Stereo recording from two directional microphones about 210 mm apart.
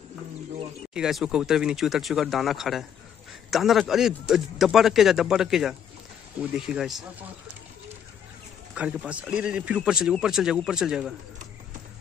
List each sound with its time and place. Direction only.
0.9 s speech: 5° right (ahead or behind)
8.7 s speech: 5° right (ahead or behind)